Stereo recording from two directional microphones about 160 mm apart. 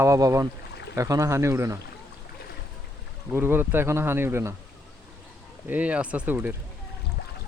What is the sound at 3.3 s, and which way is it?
Speech, 15° right (ahead or behind).